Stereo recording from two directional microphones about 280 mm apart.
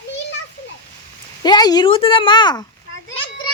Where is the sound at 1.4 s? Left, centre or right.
Centre.